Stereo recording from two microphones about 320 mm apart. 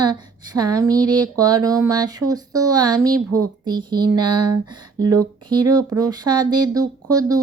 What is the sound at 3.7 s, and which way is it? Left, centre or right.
Speech, centre.